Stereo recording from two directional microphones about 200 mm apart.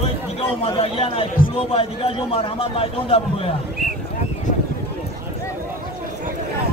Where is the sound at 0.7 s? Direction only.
30° left (ahead or behind).